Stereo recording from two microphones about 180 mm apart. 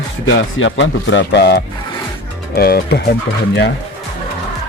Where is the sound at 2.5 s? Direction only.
60° left (ahead or behind).